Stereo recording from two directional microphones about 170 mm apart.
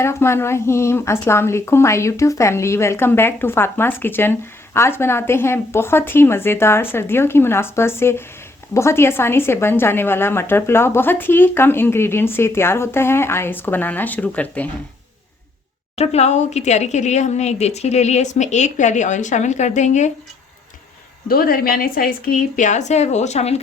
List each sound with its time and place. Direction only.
0.0 s a woman's voice: 15° left (ahead or behind)
16.0 s a woman's voice: 40° left (ahead or behind)
21.2 s a woman's voice: 60° left (ahead or behind); by 23.6 s 40° left (ahead or behind)